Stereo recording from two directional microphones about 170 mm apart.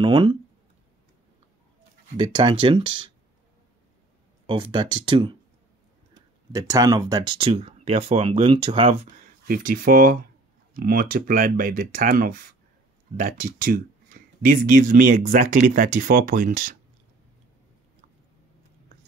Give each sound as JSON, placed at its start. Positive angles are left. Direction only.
{"t": 0.0, "sound": "speech", "side_deg": -30}
{"t": 2.1, "sound": "speech", "side_deg": -25}
{"t": 4.5, "sound": "speech", "side_deg": -30}
{"t": 6.5, "sound": "speech", "side_deg": -20}
{"t": 9.0, "sound": "speech", "side_deg": -50}